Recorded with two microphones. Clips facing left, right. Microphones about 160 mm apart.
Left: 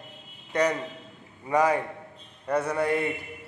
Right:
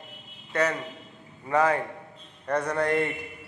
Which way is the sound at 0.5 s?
15° left (ahead or behind).